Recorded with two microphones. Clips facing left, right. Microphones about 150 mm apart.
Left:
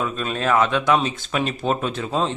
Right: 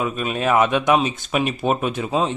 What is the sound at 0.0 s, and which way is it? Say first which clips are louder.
Speech: right 2 dB; 15° right (ahead or behind).